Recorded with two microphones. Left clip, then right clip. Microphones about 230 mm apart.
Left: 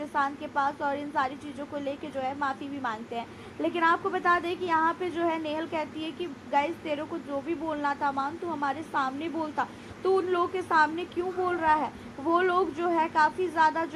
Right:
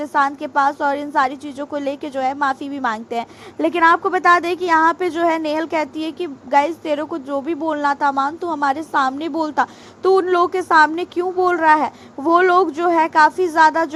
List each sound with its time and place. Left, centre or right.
0.0 s a woman's voice: right